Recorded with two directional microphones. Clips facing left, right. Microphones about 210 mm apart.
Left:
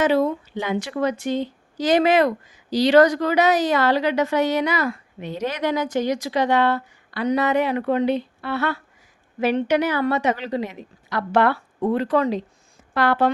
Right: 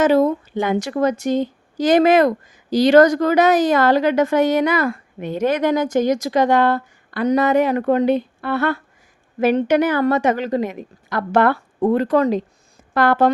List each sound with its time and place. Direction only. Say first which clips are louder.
0.0 s a woman's voice: right 4 dB; 45° right (ahead or behind)